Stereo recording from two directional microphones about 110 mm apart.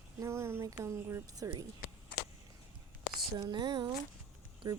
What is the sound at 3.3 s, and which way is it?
Speech, 40° right (ahead or behind).